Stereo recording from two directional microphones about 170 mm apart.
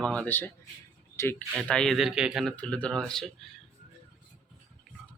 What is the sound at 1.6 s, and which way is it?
Speech, 5° left (ahead or behind).